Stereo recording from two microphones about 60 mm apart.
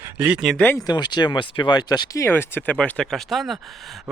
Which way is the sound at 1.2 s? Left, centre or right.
Left.